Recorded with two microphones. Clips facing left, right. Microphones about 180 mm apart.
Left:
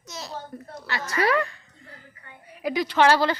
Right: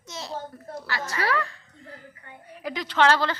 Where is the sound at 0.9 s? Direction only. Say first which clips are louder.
Left 4 dB; 20° left (ahead or behind).